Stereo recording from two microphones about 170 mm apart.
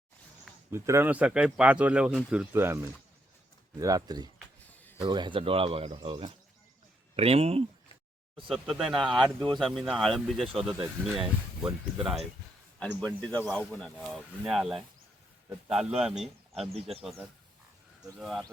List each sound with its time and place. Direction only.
0.7 s speech: 15° right (ahead or behind); by 7.6 s 35° right (ahead or behind)
8.4 s speech: centre (ahead or behind)
16.7 s speech: 35° right (ahead or behind)
17.0 s speech: centre (ahead or behind)